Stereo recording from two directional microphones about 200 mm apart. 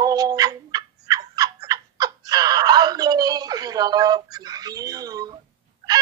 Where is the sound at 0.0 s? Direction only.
20° right (ahead or behind).